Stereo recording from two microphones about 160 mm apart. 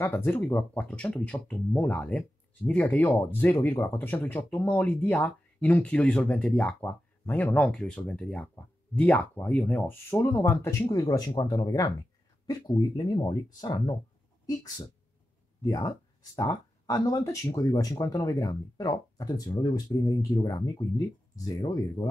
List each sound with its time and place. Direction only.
0.0 s speech: 10° left (ahead or behind)
15.6 s speech: 25° left (ahead or behind)